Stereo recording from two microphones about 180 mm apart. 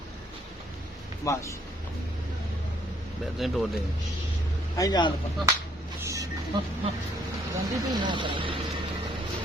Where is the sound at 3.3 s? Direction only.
Centre (ahead or behind).